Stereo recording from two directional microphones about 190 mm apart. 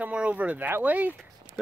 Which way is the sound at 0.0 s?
5° right (ahead or behind).